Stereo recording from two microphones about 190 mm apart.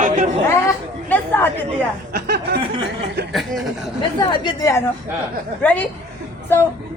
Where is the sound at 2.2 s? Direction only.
55° right (ahead or behind).